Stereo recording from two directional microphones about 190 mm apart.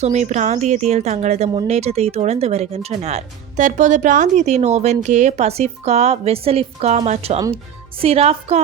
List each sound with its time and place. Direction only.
0.0 s speech: 35° right (ahead or behind)